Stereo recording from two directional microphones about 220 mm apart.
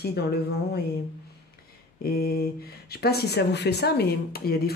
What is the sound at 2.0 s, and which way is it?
Speech, 45° left (ahead or behind).